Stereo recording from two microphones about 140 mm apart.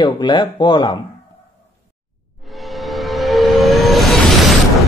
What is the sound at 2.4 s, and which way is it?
Vehicle, centre (ahead or behind).